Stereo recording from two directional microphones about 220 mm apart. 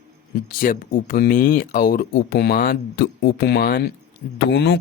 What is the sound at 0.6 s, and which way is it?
Speech, 40° left (ahead or behind).